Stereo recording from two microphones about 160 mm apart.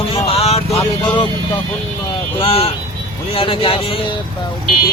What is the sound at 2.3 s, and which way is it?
Speech, 35° left (ahead or behind).